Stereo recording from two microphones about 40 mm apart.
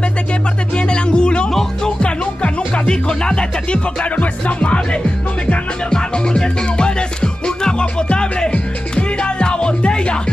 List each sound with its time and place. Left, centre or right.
0.7 s speech: left
1.5 s speech: centre
2.0 s music: left
4.0 s music: left
5.9 s music: centre